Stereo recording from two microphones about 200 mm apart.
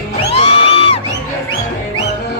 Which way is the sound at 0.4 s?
30° left (ahead or behind).